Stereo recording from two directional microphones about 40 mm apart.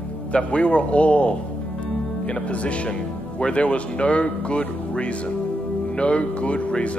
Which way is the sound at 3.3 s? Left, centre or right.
Left.